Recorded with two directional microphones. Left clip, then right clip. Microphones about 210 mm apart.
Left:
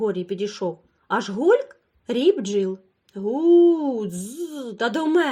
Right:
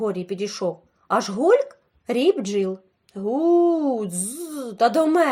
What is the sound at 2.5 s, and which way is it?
Speech, centre (ahead or behind).